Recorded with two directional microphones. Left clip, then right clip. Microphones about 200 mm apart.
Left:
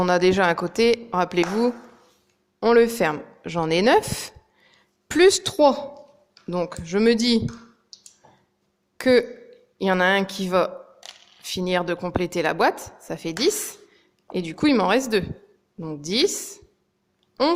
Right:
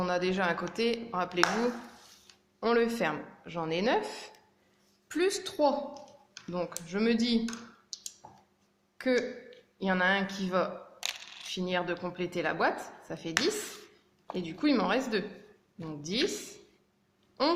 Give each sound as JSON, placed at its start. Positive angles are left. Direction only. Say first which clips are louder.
{"t": 0.0, "sound": "speech", "louder": "left 11 dB", "side_deg": 50}
{"t": 2.6, "sound": "speech", "louder": "left 10 dB", "side_deg": 45}
{"t": 7.9, "sound": "clicking", "louder": "right 4 dB", "side_deg": 5}
{"t": 9.0, "sound": "speech", "louder": "left 11 dB", "side_deg": 50}
{"t": 14.3, "sound": "speech", "louder": "left 8 dB", "side_deg": 50}
{"t": 17.4, "sound": "speech", "louder": "left 7 dB", "side_deg": 50}